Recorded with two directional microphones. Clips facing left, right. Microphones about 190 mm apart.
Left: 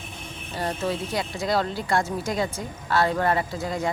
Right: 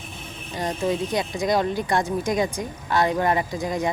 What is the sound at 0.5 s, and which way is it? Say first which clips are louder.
Speech: right 3 dB; 15° right (ahead or behind).